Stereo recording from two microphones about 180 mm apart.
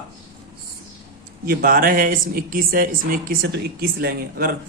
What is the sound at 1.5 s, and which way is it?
Speech, 55° right (ahead or behind).